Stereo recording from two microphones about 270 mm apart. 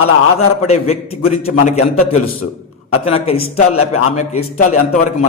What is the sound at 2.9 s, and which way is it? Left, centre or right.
Speech, left.